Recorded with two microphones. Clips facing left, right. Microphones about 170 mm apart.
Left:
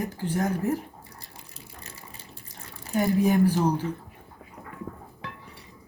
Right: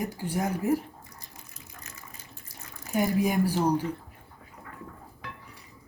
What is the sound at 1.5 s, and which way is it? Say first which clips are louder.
Water: left 4 dB; 30° left (ahead or behind).